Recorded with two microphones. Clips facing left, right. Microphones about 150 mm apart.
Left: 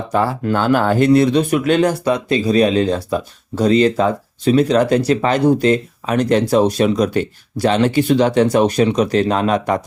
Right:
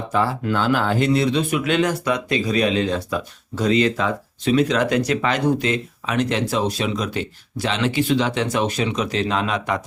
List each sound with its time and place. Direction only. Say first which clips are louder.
0.1 s speech: left 4 dB; 45° left (ahead or behind)